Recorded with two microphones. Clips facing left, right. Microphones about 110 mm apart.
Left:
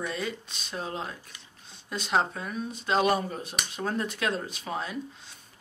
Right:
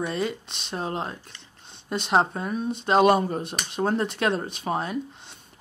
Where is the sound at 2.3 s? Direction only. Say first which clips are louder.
Right 6 dB; 35° right (ahead or behind).